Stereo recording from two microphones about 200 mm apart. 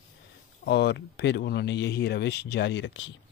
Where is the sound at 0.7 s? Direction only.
55° left (ahead or behind).